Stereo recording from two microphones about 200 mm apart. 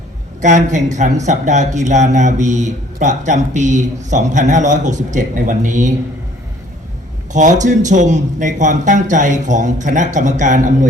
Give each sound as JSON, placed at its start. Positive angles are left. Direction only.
{"t": 0.4, "sound": "speech", "side_deg": -35}
{"t": 7.3, "sound": "speech", "side_deg": -40}